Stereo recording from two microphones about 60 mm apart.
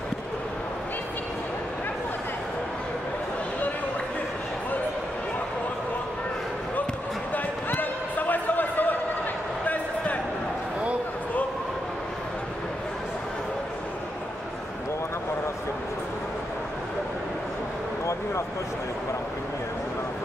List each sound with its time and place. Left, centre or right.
7.3 s basketball bounce: left